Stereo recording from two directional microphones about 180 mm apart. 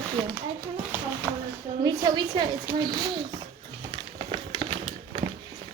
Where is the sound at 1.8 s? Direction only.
25° right (ahead or behind).